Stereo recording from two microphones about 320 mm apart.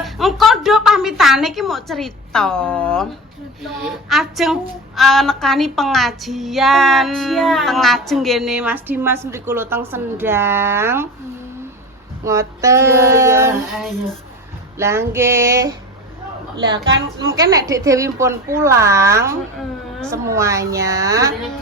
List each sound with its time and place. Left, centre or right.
0.0 s a woman's voice: centre
12.2 s a woman's voice: centre
16.9 s a woman's voice: right
17.3 s a woman's voice: centre